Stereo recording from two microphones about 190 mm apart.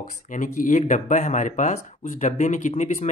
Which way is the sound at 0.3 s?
45° left (ahead or behind).